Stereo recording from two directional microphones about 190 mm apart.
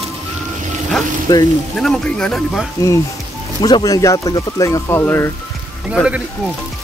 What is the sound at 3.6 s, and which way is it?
Speech, 20° left (ahead or behind).